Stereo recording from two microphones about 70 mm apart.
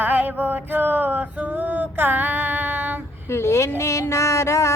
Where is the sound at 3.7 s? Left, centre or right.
Left.